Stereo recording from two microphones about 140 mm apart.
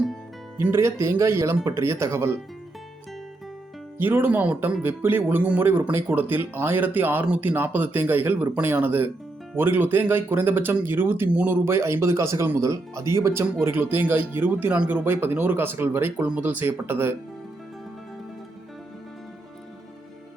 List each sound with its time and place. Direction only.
0.5 s speech: 20° right (ahead or behind)
3.9 s speech: 15° right (ahead or behind)